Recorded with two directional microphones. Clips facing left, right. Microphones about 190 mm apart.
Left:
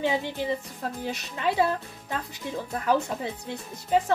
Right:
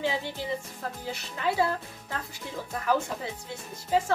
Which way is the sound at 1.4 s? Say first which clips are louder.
Left 2 dB; 20° left (ahead or behind).